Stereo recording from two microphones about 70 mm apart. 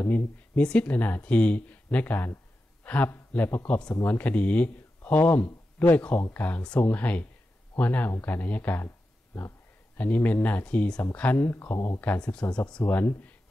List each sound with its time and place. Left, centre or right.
0.1 s speech: centre
2.8 s a sound: left
3.1 s speech: left
8.8 s a sound: left
9.9 s speech: left
12.2 s speech: centre
12.8 s speech: left